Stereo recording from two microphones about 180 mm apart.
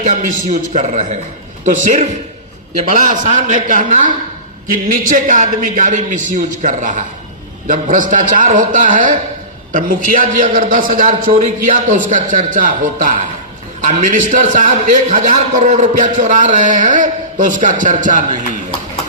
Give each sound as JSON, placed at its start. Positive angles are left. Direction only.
{"t": 0.0, "sound": "a man's voice", "side_deg": -45}